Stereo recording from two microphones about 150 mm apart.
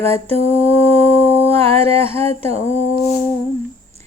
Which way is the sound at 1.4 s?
40° right (ahead or behind).